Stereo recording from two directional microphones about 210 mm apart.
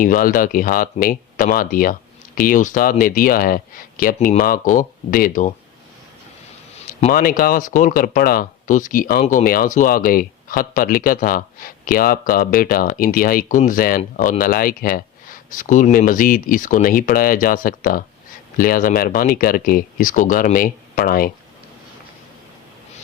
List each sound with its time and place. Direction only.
0.0 s speech: 40° left (ahead or behind)
7.1 s speech: 45° left (ahead or behind)